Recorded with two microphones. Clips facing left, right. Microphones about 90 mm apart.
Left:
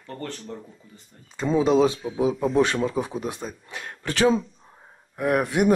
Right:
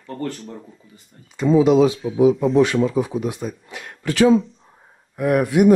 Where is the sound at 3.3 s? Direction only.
35° left (ahead or behind).